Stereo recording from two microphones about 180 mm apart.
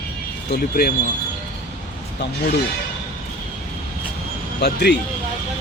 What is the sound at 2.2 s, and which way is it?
Speech, 60° left (ahead or behind).